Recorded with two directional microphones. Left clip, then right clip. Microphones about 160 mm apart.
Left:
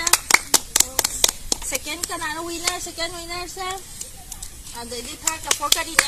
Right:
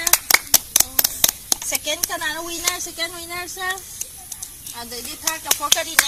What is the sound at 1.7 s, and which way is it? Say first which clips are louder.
Speech: right 4 dB; 30° right (ahead or behind).